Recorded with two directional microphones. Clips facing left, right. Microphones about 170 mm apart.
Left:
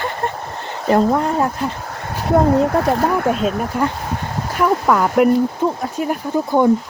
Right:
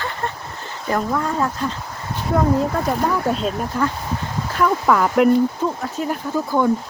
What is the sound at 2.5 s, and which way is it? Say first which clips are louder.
Speech: left 4 dB; 65° left (ahead or behind).